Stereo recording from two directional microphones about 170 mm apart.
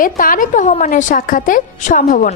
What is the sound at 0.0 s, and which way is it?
A woman's voice, 55° left (ahead or behind).